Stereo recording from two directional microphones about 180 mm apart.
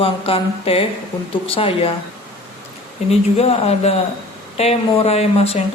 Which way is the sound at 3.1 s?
35° left (ahead or behind).